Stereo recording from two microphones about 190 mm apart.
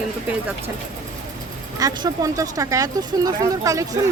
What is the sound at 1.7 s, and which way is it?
Speech, 20° right (ahead or behind).